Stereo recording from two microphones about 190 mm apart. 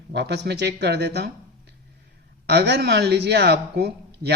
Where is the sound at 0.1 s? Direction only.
60° right (ahead or behind).